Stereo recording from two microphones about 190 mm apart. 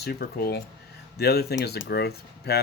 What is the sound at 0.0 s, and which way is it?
Speech, 55° left (ahead or behind).